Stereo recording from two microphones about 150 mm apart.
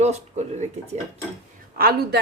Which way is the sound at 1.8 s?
90° right.